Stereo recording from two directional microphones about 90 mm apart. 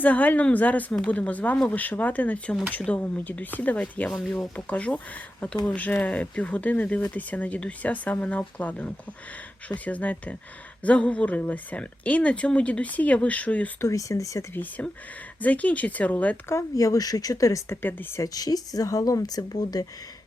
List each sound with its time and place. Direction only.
0.0 s speech: 15° left (ahead or behind)
4.2 s speech: 5° left (ahead or behind)
13.8 s a woman's voice: 35° left (ahead or behind)
14.5 s speech: 20° left (ahead or behind)
16.5 s a woman's voice: 35° left (ahead or behind)